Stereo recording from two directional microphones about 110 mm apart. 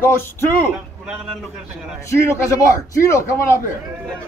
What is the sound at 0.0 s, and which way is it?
Speech, 20° left (ahead or behind).